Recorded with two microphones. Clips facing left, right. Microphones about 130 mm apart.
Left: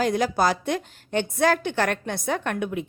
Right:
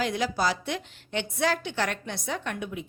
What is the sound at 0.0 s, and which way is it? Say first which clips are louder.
Speech: left 5 dB; 45° left (ahead or behind).